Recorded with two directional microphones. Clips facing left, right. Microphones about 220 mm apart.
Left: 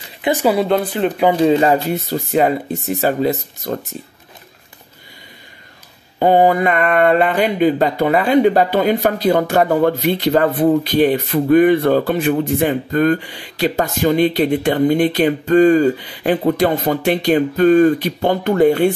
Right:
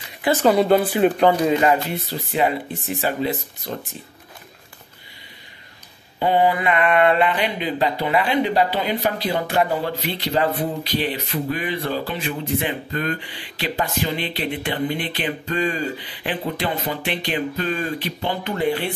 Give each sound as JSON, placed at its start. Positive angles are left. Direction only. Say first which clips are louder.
{"t": 0.2, "sound": "speech", "louder": "left 1 dB", "side_deg": 10}
{"t": 1.3, "sound": "speech", "louder": "left 5 dB", "side_deg": 30}
{"t": 6.1, "sound": "speech", "louder": "left 6 dB", "side_deg": 45}